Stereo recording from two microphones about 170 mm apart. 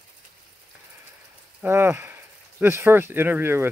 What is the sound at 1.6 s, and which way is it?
Speech, 15° right (ahead or behind).